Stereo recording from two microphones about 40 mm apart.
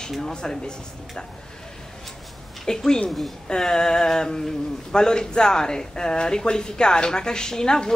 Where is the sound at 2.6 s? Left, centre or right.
Centre.